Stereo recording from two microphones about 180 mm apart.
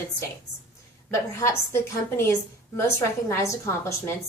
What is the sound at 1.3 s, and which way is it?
A woman's voice, 15° left (ahead or behind).